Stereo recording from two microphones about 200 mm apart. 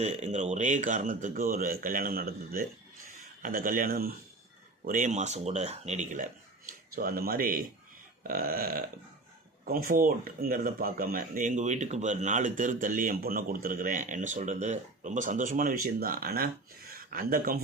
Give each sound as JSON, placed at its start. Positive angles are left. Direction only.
{"t": 0.0, "sound": "speech", "side_deg": -35}